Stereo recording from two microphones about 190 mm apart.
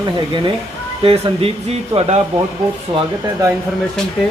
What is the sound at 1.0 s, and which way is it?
Speech, 30° right (ahead or behind).